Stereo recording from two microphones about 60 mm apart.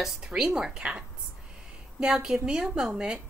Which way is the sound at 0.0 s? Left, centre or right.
Centre.